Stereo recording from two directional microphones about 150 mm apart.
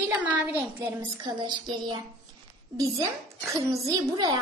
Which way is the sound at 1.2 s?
30° right (ahead or behind).